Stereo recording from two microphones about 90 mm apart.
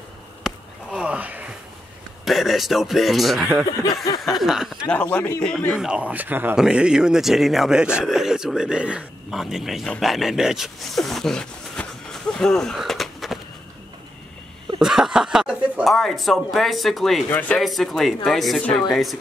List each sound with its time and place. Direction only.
0.5 s a sound: 5° right (ahead or behind)
2.2 s speech: centre (ahead or behind)
4.8 s speech: 15° left (ahead or behind)
5.8 s speech: 10° right (ahead or behind)
6.5 s speech: 10° right (ahead or behind)
14.8 s chuckle: 5° right (ahead or behind)
15.8 s speech: centre (ahead or behind)
17.3 s a man's voice: 20° left (ahead or behind)
17.6 s speech: centre (ahead or behind)